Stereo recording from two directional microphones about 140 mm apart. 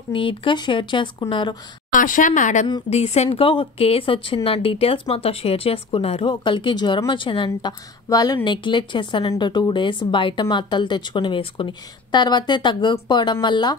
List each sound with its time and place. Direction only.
0.1 s speech: 40° left (ahead or behind)
1.9 s speech: 70° left (ahead or behind)
2.9 s speech: 50° left (ahead or behind)
3.3 s speech: 40° left (ahead or behind)
8.1 s speech: 25° left (ahead or behind)